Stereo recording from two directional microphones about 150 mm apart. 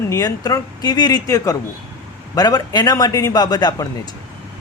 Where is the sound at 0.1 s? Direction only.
25° left (ahead or behind).